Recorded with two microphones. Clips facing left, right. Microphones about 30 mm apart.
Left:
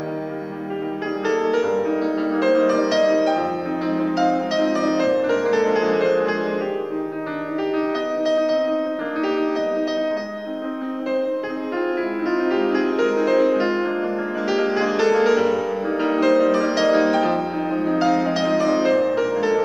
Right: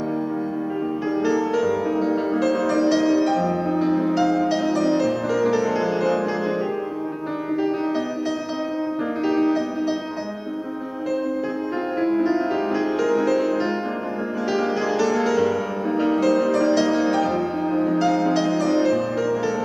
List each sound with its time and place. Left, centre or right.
1.2 s music: left
9.2 s music: centre
12.3 s music: left
15.0 s music: left